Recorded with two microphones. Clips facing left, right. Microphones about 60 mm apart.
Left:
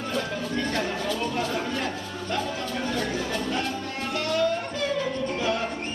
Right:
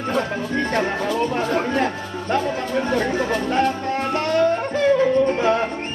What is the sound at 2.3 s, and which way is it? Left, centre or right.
Music, right.